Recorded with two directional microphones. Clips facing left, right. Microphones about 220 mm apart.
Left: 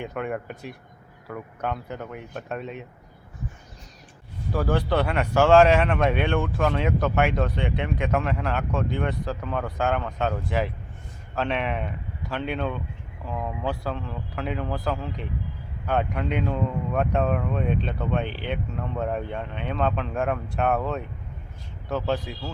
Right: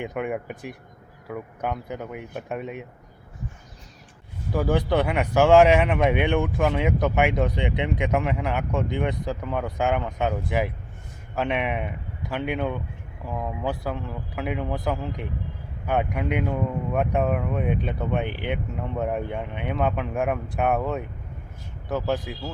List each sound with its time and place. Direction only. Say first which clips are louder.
0.0 s speech: right 2 dB; 15° right (ahead or behind)
4.5 s speech: right 1 dB; 15° right (ahead or behind)